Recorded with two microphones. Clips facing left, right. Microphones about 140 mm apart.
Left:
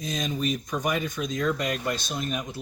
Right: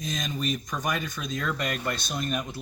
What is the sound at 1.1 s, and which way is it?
Speech, 20° left (ahead or behind).